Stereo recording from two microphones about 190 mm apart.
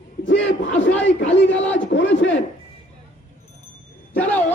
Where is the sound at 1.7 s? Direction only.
75° left (ahead or behind).